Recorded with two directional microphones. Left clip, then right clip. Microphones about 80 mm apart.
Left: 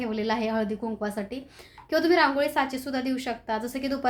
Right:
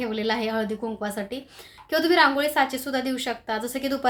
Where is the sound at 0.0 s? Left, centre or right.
Centre.